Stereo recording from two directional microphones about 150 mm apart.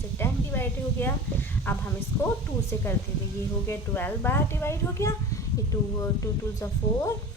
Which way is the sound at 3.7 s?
15° left (ahead or behind).